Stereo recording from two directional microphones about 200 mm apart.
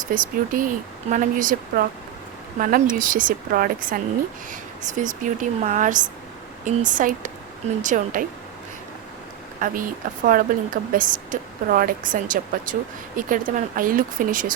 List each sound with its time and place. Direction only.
0.1 s a woman's voice: 45° right (ahead or behind)
9.6 s a woman's voice: 45° right (ahead or behind)